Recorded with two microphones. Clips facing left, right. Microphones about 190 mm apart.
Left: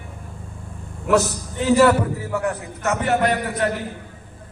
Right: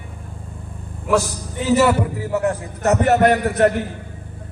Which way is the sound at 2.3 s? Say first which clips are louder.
Right 4 dB; 20° right (ahead or behind).